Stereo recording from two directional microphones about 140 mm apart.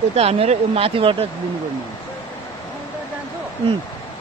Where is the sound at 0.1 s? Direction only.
50° right (ahead or behind).